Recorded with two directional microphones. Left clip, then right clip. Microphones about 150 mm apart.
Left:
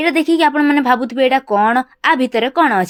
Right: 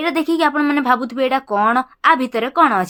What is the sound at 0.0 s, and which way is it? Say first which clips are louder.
A woman's voice: left 4 dB; 20° left (ahead or behind).